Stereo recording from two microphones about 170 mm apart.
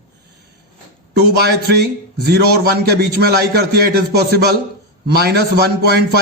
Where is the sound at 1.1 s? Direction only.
75° right (ahead or behind).